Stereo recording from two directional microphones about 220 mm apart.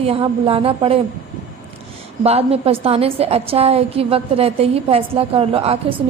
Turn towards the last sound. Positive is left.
turn(degrees=-25)  # may be behind; listen again after turning